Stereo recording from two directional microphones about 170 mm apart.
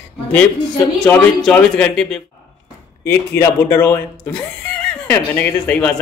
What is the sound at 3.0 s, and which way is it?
Speech, 15° left (ahead or behind).